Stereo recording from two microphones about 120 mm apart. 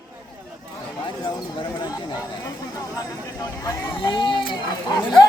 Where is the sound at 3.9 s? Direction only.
40° left (ahead or behind).